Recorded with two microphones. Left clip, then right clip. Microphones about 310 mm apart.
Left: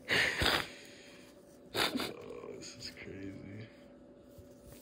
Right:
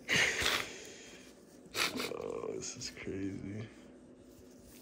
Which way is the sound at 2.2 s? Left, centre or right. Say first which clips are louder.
Right 6 dB; centre.